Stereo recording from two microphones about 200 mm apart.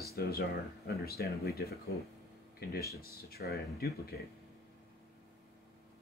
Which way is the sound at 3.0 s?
50° left (ahead or behind).